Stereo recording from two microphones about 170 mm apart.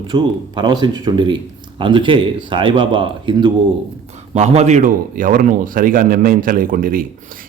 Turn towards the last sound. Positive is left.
turn(degrees=-55)  # may be behind; listen again after turning